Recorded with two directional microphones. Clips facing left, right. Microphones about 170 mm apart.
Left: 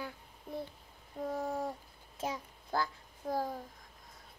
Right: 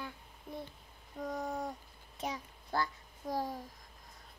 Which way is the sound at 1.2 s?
5° left (ahead or behind).